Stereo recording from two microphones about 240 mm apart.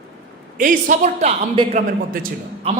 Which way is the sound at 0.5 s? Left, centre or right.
Right.